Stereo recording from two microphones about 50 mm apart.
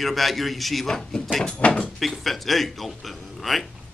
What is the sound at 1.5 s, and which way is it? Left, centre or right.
Speech, left.